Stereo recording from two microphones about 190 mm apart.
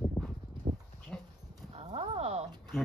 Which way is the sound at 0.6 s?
25° right (ahead or behind).